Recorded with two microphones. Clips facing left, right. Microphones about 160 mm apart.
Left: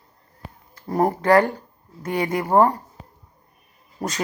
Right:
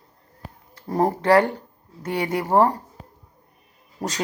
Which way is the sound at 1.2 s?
15° right (ahead or behind).